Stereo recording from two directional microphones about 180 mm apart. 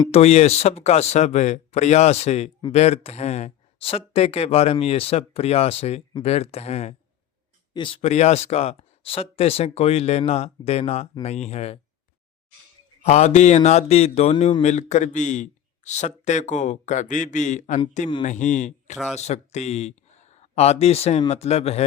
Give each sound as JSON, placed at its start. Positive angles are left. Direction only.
{"t": 0.1, "sound": "speech", "side_deg": 35}
{"t": 7.7, "sound": "speech", "side_deg": 25}
{"t": 13.1, "sound": "speech", "side_deg": 40}